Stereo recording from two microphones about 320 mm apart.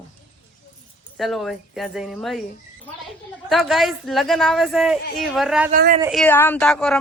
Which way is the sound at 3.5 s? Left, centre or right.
Centre.